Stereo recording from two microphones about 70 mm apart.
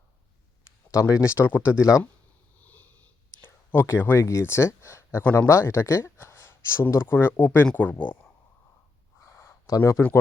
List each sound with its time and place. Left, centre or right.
0.9 s speech: left
1.5 s speech: left
1.8 s speech: left
2.6 s sniff: left
3.4 s a sound: left
4.2 s speech: left
9.2 s a sound: left
9.7 s speech: left